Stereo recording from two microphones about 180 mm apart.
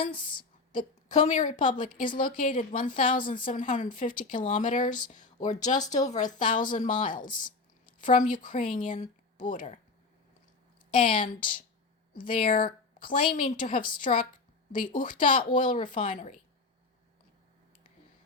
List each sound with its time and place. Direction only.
0.0 s a woman's voice: 25° left (ahead or behind)
1.0 s speech: 40° left (ahead or behind)
7.3 s a sound: 25° left (ahead or behind)
8.0 s speech: 45° left (ahead or behind)
10.9 s speech: 30° left (ahead or behind)
12.2 s speech: 50° left (ahead or behind)
15.3 s speech: 25° left (ahead or behind)
15.5 s speech: 50° left (ahead or behind)